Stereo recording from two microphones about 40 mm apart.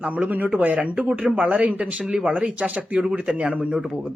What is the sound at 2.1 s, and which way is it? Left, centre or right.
Speech, right.